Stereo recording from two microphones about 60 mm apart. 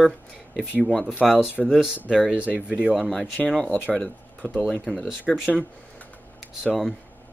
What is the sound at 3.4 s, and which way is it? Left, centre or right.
Speech, centre.